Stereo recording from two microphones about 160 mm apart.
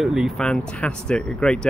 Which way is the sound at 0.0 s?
5° right (ahead or behind).